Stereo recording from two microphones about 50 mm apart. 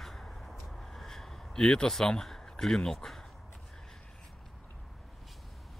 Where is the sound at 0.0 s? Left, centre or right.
Centre.